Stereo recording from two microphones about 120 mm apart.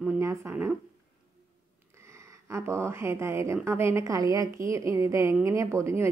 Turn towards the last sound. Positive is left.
turn(degrees=-25)  # may be behind; listen again after turning